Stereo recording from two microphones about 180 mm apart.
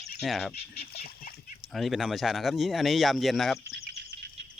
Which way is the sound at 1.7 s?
Centre (ahead or behind).